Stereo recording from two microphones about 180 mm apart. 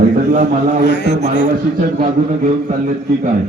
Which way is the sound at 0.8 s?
70° left (ahead or behind).